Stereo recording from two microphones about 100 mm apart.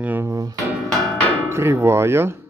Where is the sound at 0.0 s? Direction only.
20° right (ahead or behind).